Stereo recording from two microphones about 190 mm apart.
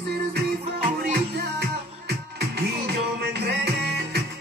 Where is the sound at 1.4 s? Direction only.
60° right (ahead or behind).